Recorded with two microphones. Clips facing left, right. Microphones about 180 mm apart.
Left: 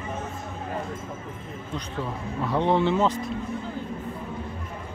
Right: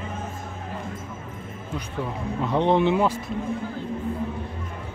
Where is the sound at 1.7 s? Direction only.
15° right (ahead or behind).